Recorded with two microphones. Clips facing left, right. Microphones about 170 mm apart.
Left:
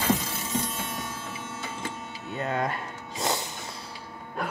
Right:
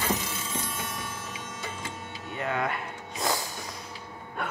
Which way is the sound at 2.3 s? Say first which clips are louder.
Left 1 dB; 35° left (ahead or behind).